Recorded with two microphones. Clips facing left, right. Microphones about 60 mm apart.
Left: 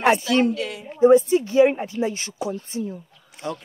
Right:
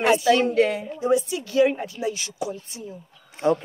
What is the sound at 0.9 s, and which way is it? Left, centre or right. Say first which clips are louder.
Speech: left 11 dB; left.